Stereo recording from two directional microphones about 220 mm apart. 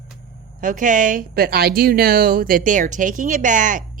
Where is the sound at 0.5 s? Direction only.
35° right (ahead or behind).